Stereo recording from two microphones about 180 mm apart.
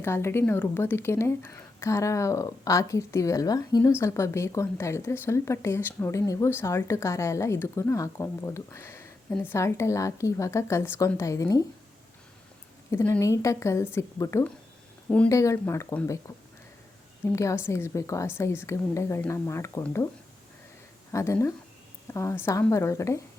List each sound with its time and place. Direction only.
0.0 s a woman's voice: 15° left (ahead or behind)
12.9 s a woman's voice: 15° left (ahead or behind)
17.3 s a woman's voice: 15° left (ahead or behind)
21.1 s a woman's voice: 15° left (ahead or behind)